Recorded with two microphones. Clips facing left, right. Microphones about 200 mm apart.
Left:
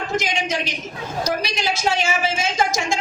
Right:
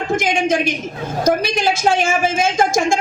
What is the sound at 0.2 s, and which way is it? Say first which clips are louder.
A woman's voice: right 7 dB; 50° right (ahead or behind).